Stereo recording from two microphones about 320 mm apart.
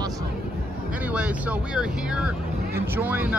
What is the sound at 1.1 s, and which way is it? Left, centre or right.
Vehicle, centre.